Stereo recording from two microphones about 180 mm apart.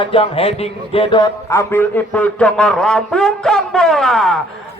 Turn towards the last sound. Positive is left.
turn(degrees=0)  # may be behind; listen again after turning